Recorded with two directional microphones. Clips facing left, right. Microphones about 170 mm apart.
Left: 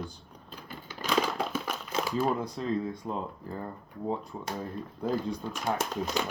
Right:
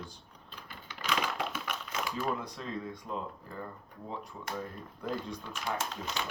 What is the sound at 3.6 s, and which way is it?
Speech, 35° left (ahead or behind).